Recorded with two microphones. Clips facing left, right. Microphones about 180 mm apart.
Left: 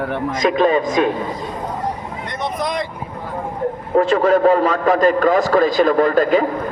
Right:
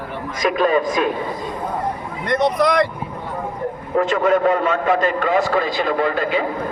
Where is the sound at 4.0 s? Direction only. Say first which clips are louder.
Left 3 dB; 35° left (ahead or behind).